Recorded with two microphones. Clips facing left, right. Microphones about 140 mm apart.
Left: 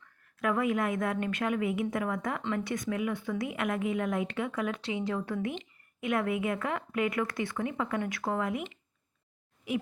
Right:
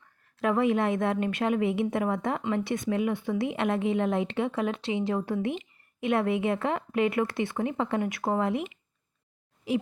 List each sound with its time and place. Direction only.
0.3 s a woman's voice: 25° right (ahead or behind)